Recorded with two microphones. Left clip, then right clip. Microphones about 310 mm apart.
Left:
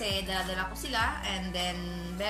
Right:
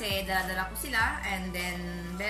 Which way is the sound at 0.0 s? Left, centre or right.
Centre.